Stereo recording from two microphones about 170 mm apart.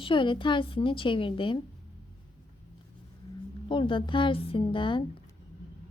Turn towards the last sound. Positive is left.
turn(degrees=30)  # may be behind; listen again after turning